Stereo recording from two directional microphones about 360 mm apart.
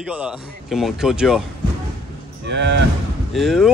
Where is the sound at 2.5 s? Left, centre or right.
Right.